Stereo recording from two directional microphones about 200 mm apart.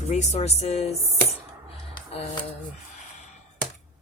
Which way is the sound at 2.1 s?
30° left (ahead or behind).